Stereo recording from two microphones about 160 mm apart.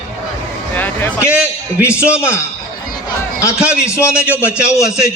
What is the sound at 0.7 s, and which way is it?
Speech, 10° left (ahead or behind).